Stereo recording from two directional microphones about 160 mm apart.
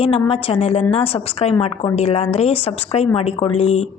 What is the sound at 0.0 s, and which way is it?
A woman's voice, 35° left (ahead or behind).